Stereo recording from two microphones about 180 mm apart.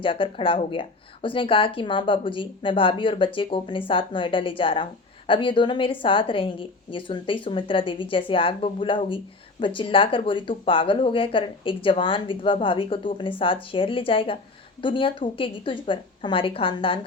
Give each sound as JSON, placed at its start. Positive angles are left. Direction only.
{"t": 0.0, "sound": "a woman's voice", "side_deg": 30}